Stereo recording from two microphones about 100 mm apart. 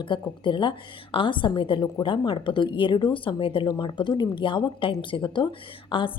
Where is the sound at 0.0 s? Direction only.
55° left (ahead or behind).